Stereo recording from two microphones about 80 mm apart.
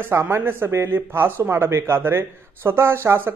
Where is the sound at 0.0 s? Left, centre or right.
Right.